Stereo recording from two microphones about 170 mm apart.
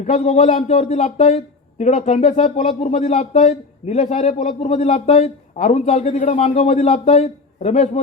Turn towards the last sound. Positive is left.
turn(degrees=40)  # may be behind; listen again after turning